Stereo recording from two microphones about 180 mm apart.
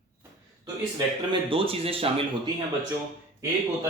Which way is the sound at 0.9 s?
30° right (ahead or behind).